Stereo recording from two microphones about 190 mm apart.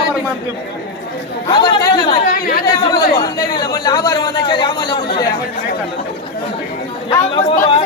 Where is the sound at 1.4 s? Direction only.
25° left (ahead or behind).